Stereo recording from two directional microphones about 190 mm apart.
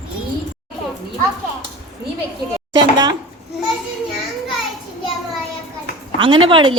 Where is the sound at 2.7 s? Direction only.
20° right (ahead or behind).